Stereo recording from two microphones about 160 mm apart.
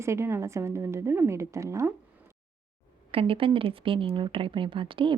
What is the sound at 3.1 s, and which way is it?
Speech, 35° right (ahead or behind).